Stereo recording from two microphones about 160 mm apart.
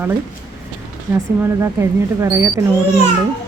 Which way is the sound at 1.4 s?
15° right (ahead or behind).